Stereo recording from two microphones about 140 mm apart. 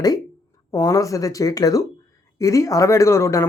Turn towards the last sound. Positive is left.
turn(degrees=20)  # may be behind; listen again after turning